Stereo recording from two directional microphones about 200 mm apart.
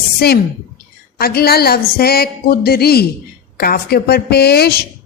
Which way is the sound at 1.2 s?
50° left (ahead or behind).